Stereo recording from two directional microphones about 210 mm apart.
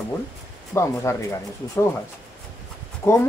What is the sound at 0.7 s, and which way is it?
Speech, 15° left (ahead or behind).